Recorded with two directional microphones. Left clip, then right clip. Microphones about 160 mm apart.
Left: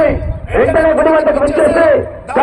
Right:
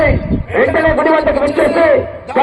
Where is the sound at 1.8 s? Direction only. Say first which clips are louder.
Even; 35° right (ahead or behind).